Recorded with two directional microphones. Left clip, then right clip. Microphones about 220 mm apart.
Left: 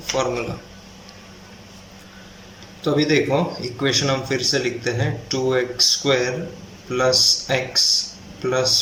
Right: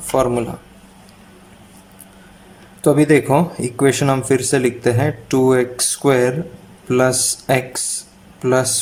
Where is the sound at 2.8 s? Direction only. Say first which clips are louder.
Right 5 dB; 35° right (ahead or behind).